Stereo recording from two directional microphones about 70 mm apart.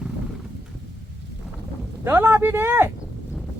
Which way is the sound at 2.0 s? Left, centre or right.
Right.